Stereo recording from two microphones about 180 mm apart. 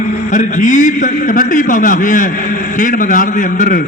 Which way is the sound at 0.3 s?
45° left (ahead or behind).